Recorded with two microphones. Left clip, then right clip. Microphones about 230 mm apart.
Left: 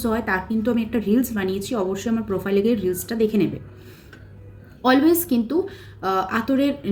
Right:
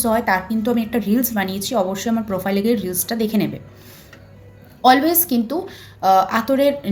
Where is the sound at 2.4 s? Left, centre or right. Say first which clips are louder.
Left 1 dB; centre.